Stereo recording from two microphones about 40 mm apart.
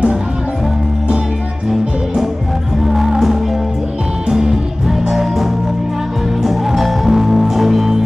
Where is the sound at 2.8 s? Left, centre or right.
Centre.